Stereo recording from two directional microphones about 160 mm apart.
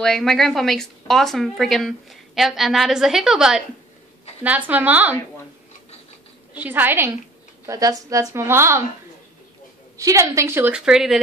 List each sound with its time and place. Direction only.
0.0 s a woman's voice: centre (ahead or behind)
6.5 s a woman's voice: 10° right (ahead or behind)
9.9 s a woman's voice: 20° right (ahead or behind); by 11.1 s 5° right (ahead or behind)